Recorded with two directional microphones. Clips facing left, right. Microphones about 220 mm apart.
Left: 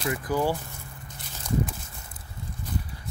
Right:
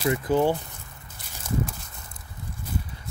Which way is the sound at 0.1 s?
25° right (ahead or behind).